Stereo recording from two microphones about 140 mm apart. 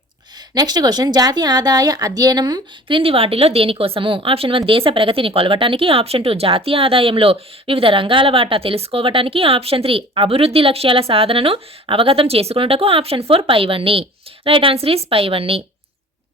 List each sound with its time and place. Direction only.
0.5 s a woman's voice: 30° right (ahead or behind)